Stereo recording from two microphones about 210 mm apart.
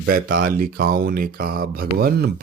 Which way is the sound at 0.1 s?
45° right (ahead or behind).